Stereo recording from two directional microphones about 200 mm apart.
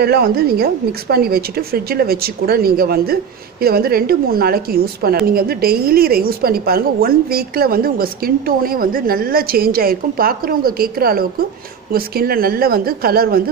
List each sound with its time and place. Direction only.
0.0 s a woman's voice: 50° right (ahead or behind)